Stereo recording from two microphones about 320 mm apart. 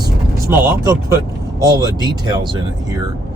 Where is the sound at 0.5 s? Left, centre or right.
Centre.